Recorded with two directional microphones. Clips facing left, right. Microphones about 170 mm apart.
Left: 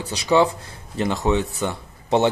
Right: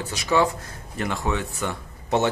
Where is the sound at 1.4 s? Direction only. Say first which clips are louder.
Left 3 dB; 30° left (ahead or behind).